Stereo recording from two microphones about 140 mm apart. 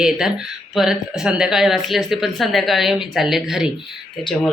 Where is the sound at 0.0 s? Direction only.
5° right (ahead or behind).